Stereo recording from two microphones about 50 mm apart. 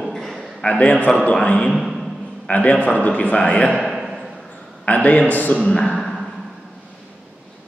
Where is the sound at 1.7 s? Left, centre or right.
Centre.